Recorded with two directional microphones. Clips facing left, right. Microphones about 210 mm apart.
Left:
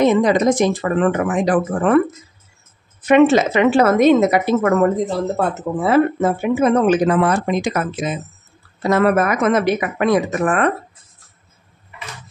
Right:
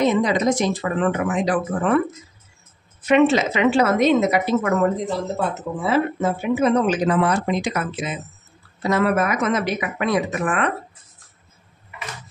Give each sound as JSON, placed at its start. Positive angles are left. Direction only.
{"t": 0.0, "sound": "speech", "side_deg": 50}
{"t": 3.0, "sound": "speech", "side_deg": 50}
{"t": 5.8, "sound": "speech", "side_deg": 55}